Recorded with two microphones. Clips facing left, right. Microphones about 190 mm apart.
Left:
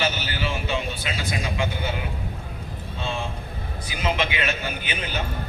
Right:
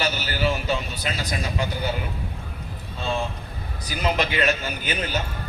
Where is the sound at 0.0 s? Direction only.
40° right (ahead or behind).